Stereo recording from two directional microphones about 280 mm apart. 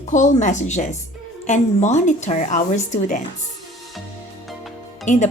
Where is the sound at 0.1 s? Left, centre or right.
Left.